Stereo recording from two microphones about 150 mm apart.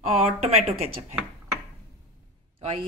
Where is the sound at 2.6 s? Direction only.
40° right (ahead or behind).